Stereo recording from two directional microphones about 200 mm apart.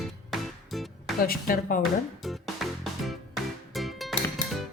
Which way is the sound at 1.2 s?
45° left (ahead or behind).